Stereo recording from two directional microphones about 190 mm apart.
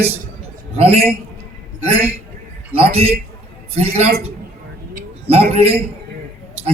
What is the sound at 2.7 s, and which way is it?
A man's voice, 35° right (ahead or behind).